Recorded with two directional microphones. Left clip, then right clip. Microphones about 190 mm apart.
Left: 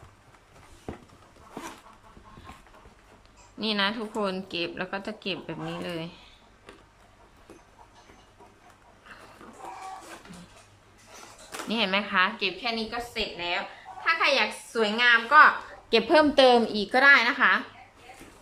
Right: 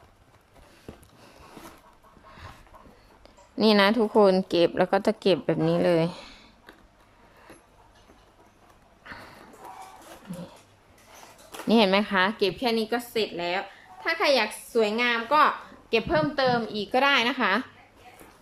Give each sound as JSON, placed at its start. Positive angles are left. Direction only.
{"t": 3.6, "sound": "a woman's voice", "side_deg": -30}
{"t": 9.1, "sound": "a sound", "side_deg": -35}
{"t": 11.7, "sound": "a woman's voice", "side_deg": -25}
{"t": 15.9, "sound": "a woman's voice", "side_deg": 0}
{"t": 16.7, "sound": "a woman's voice", "side_deg": -5}